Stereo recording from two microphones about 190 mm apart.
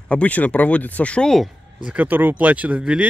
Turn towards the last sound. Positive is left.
turn(degrees=-5)  # may be behind; listen again after turning